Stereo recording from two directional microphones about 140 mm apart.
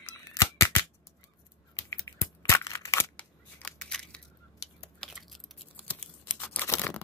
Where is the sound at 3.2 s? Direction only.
10° left (ahead or behind).